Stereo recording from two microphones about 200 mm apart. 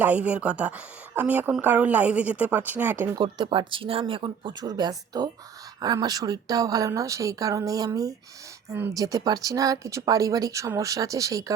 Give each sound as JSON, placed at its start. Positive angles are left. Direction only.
{"t": 0.0, "sound": "speech", "side_deg": -5}
{"t": 3.3, "sound": "speech", "side_deg": -20}